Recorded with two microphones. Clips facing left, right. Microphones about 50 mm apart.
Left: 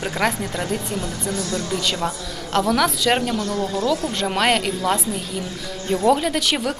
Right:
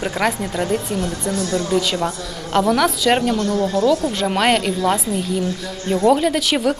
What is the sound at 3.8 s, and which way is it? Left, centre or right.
Speech, right.